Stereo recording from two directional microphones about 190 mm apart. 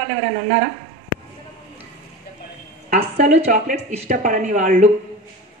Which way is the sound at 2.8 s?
45° right (ahead or behind).